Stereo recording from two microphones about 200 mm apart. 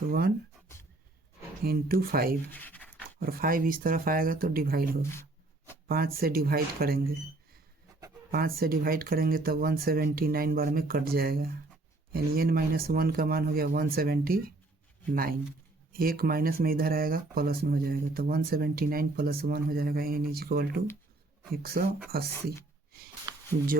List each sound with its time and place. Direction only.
0.1 s speech: 50° right (ahead or behind)
1.6 s speech: 50° right (ahead or behind)
2.5 s speech: 10° left (ahead or behind)
3.2 s speech: 45° right (ahead or behind)
8.3 s speech: 45° right (ahead or behind)
23.3 s a sound: 20° right (ahead or behind)